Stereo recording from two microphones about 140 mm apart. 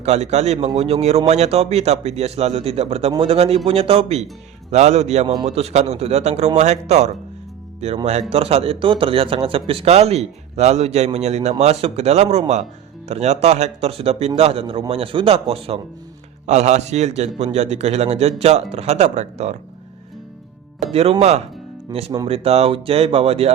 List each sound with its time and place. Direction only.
0.0 s a man's voice: 50° right (ahead or behind)
20.9 s a man's voice: 45° right (ahead or behind)
21.9 s speech: 25° right (ahead or behind)
22.3 s a man's voice: 45° right (ahead or behind)